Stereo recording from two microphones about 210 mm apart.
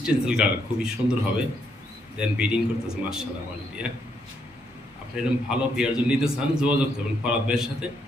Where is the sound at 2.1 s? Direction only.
5° right (ahead or behind).